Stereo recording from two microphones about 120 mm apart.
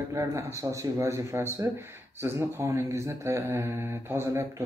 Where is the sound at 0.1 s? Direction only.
25° right (ahead or behind).